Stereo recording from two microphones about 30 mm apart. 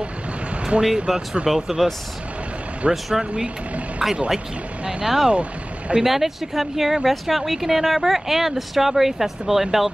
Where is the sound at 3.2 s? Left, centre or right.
Right.